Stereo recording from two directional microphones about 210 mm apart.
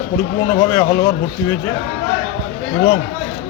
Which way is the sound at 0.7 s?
15° left (ahead or behind).